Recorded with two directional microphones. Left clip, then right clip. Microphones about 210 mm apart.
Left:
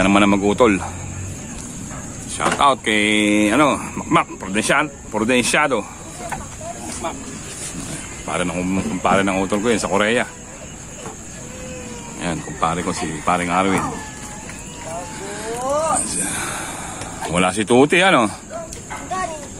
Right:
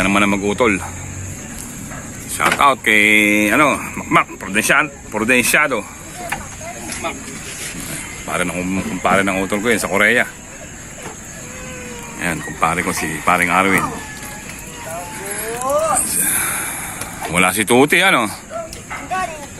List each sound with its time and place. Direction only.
0.0 s speech: 15° left (ahead or behind)
2.3 s speech: centre (ahead or behind)
8.3 s speech: 10° left (ahead or behind)
12.2 s speech: centre (ahead or behind)
15.2 s a sound: 10° left (ahead or behind)
17.3 s speech: 5° left (ahead or behind)